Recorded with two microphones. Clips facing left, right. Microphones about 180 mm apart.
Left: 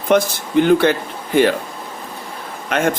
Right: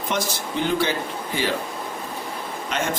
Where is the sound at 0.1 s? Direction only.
60° left (ahead or behind).